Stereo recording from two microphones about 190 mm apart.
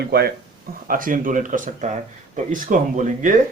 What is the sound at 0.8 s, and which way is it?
Speech, 45° right (ahead or behind).